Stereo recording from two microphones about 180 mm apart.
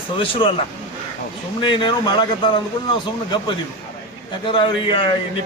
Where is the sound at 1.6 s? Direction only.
25° left (ahead or behind).